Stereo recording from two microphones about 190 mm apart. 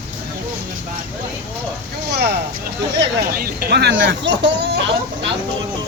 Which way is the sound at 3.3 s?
50° right (ahead or behind).